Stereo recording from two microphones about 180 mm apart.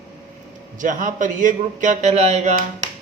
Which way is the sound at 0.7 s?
45° right (ahead or behind).